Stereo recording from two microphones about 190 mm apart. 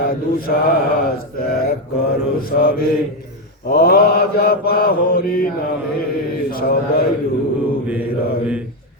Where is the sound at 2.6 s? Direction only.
50° left (ahead or behind).